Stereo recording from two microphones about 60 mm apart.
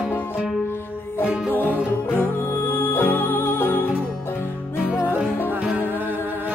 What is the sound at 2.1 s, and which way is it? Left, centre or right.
Music, left.